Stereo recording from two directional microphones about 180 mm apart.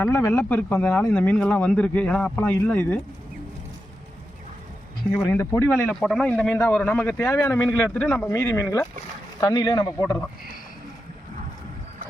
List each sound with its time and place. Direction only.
0.0 s speech: 10° left (ahead or behind)
5.1 s speech: 10° left (ahead or behind)